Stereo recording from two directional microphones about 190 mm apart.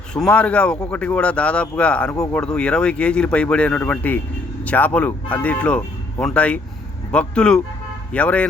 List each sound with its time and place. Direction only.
0.1 s speech: 5° left (ahead or behind)
2.1 s speech: 15° left (ahead or behind)
2.4 s speech: 5° left (ahead or behind)